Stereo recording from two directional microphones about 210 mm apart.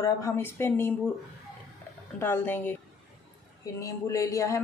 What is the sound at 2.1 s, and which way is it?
Speech, 10° left (ahead or behind).